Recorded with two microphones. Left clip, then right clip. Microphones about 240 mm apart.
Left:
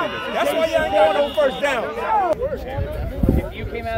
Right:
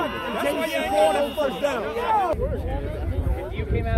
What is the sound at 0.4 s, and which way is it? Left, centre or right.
Chatter, left.